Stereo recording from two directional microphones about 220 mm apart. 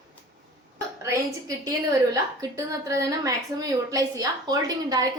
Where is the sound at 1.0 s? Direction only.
15° right (ahead or behind).